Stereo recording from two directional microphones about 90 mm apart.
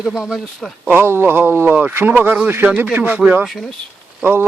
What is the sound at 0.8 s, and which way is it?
A man's voice, 25° right (ahead or behind).